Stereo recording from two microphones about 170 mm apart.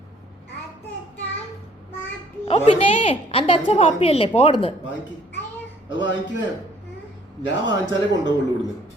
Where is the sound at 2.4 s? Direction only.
35° left (ahead or behind).